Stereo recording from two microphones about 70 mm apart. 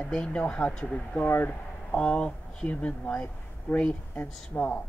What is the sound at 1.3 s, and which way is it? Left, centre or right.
Speech, left.